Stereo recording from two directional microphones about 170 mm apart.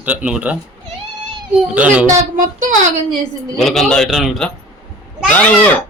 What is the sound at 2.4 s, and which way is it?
Speech, 50° right (ahead or behind).